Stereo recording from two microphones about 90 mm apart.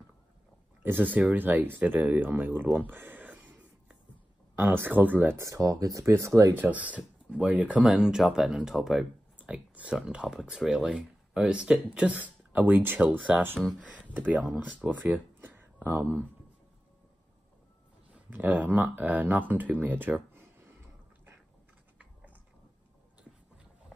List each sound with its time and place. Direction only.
1.1 s speech: 20° right (ahead or behind)
5.4 s speech: 40° right (ahead or behind)
6.6 s speech: 15° right (ahead or behind); by 9.0 s centre (ahead or behind)
9.4 s speech: 15° right (ahead or behind)
13.6 s speech: centre (ahead or behind)
14.0 s speech: 20° right (ahead or behind)
18.3 s speech: 20° right (ahead or behind)